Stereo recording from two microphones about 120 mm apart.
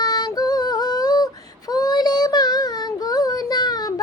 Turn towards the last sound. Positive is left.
turn(degrees=35)  # may be behind; listen again after turning